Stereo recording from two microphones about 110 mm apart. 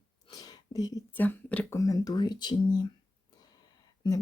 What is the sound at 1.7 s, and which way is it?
Speech, 30° left (ahead or behind).